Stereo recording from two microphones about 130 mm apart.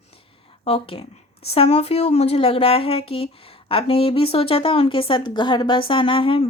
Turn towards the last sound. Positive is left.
turn(degrees=45)  # may be behind; listen again after turning